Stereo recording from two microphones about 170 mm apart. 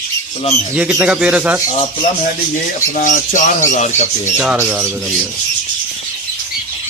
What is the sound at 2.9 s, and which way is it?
Speech, 50° left (ahead or behind).